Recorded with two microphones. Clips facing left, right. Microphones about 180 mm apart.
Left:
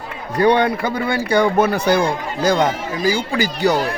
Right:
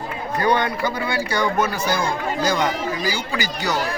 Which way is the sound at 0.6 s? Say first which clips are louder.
Left 4 dB; 55° left (ahead or behind).